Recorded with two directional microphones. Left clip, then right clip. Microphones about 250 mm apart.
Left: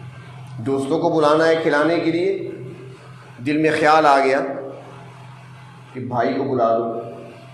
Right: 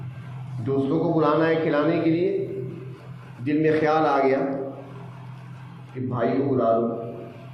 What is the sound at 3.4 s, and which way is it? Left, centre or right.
Speech, left.